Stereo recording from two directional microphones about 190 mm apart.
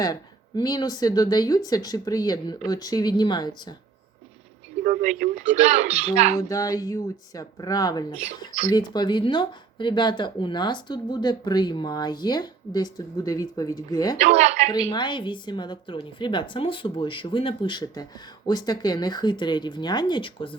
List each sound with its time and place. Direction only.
0.0 s speech: 20° left (ahead or behind)
4.8 s speech: 40° right (ahead or behind)
6.5 s speech: 20° left (ahead or behind)
14.2 s speech: 35° right (ahead or behind)
14.7 s speech: 20° left (ahead or behind)